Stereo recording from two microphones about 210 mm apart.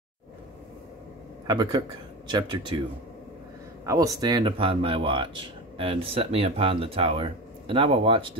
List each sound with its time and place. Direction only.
1.5 s speech: 20° right (ahead or behind)
3.8 s speech: 15° right (ahead or behind)